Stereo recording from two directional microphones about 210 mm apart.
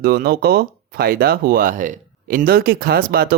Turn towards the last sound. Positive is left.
turn(degrees=-45)  # may be behind; listen again after turning